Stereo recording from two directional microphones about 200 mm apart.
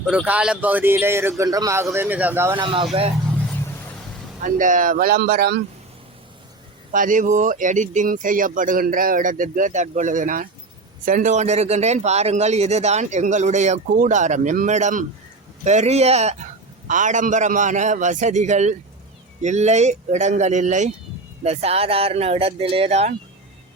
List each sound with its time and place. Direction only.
0.0 s speech: 5° right (ahead or behind)
2.6 s speech: 25° right (ahead or behind)
4.4 s speech: 40° right (ahead or behind)
6.9 s speech: 40° right (ahead or behind)